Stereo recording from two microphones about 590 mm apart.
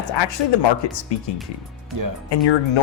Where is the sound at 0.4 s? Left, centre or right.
Left.